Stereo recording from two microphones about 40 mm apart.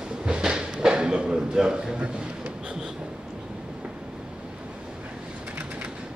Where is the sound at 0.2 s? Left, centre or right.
Centre.